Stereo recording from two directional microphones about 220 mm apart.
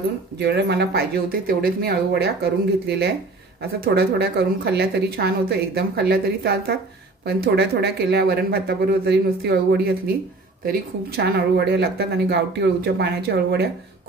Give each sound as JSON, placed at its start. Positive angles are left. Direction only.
{"t": 0.4, "sound": "speech", "side_deg": -50}